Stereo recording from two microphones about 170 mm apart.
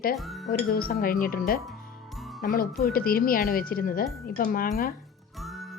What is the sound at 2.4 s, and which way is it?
Speech, 60° left (ahead or behind).